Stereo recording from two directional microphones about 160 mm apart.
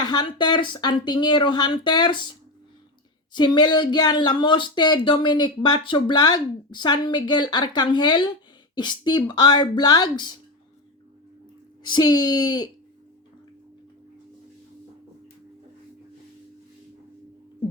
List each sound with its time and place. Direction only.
0.0 s speech: 25° left (ahead or behind)
3.3 s speech: 30° left (ahead or behind)
11.9 s speech: 25° left (ahead or behind)